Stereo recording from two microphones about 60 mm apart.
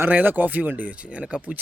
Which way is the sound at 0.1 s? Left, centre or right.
Right.